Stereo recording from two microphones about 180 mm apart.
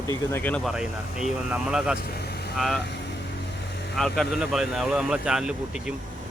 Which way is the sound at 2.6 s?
Centre (ahead or behind).